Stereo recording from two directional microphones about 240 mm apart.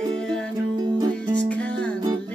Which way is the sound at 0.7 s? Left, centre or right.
Centre.